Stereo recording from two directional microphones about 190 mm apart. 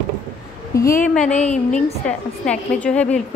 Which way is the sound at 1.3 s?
35° left (ahead or behind).